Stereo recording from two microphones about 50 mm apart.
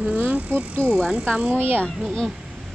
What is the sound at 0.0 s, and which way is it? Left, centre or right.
Vehicle, right.